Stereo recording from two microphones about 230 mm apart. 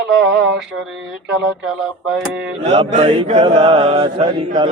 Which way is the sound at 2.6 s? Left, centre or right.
Right.